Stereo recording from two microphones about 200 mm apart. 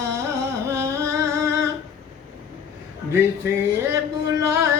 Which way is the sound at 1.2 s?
15° right (ahead or behind).